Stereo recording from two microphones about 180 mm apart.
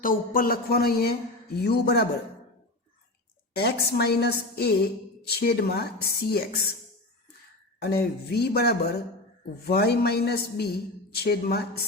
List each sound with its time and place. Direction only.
0.0 s a man's voice: 50° left (ahead or behind)
3.5 s a man's voice: 65° left (ahead or behind)
7.8 s a man's voice: 60° left (ahead or behind)